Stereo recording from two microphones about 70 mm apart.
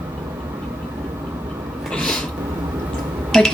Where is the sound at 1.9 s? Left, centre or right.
Centre.